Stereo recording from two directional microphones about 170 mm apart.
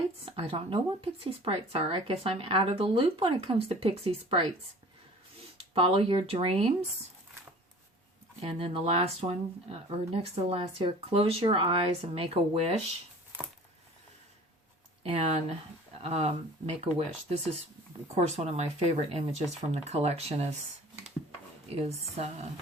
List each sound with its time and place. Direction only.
0.3 s speech: 35° right (ahead or behind)
5.7 s speech: 30° right (ahead or behind)
8.4 s speech: 35° right (ahead or behind)
15.0 s speech: 40° right (ahead or behind)
18.2 s speech: 40° right (ahead or behind)
21.8 s speech: 40° right (ahead or behind)